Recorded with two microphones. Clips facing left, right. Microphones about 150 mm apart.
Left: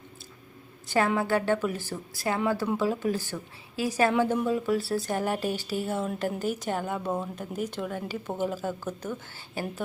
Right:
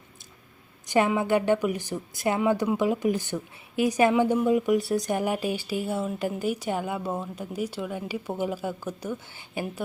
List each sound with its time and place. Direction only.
0.9 s speech: 15° right (ahead or behind)